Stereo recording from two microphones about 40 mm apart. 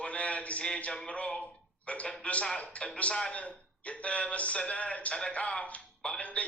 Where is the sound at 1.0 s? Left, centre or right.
Left.